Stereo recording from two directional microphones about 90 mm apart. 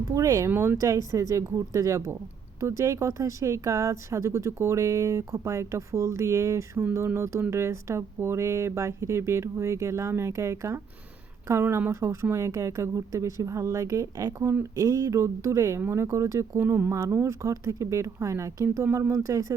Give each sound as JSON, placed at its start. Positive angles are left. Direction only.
{"t": 0.1, "sound": "speech", "side_deg": -40}
{"t": 0.5, "sound": "speech", "side_deg": -25}
{"t": 0.8, "sound": "speech", "side_deg": -40}
{"t": 15.8, "sound": "speech", "side_deg": -25}
{"t": 17.0, "sound": "speech", "side_deg": -35}